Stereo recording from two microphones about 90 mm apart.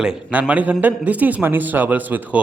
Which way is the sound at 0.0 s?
15° right (ahead or behind).